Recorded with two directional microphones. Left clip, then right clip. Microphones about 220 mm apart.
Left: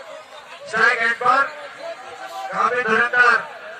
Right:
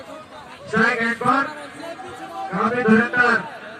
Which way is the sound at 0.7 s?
50° left (ahead or behind).